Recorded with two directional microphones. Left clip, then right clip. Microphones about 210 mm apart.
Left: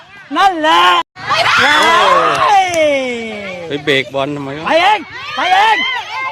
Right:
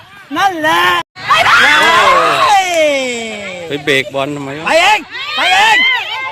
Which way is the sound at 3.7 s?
Centre (ahead or behind).